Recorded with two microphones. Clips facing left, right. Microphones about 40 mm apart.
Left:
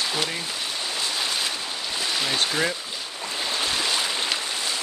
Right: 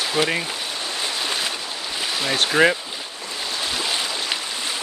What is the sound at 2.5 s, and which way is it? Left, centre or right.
Speech, right.